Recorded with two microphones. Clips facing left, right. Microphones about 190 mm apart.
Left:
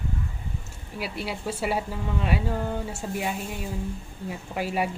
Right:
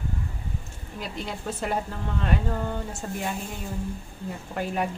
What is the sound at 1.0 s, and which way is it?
Speech, 10° left (ahead or behind).